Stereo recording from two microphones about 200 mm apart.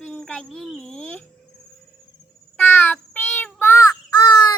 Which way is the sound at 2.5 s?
10° left (ahead or behind).